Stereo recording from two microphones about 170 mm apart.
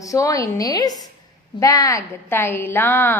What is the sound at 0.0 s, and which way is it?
A woman's voice, 20° left (ahead or behind).